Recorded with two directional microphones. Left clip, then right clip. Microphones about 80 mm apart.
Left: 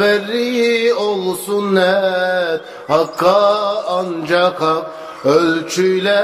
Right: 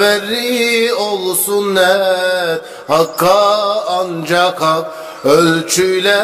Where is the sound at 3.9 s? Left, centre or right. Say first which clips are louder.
Right 1 dB; right.